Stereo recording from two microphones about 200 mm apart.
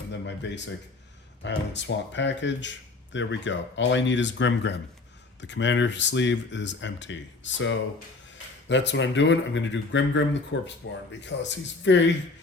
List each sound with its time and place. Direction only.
0.1 s speech: 60° left (ahead or behind)